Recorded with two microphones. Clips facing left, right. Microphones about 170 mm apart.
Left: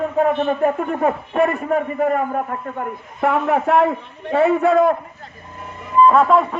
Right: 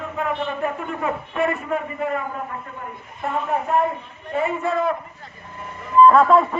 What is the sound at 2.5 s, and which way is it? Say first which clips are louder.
Speech: left 6 dB; 50° left (ahead or behind).